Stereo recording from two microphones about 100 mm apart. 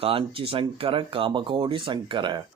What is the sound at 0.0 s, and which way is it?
Speech, 65° right (ahead or behind).